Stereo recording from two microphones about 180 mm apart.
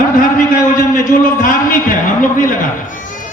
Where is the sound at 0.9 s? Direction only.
50° left (ahead or behind).